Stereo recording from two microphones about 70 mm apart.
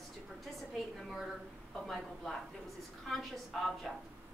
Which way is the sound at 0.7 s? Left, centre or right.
Centre.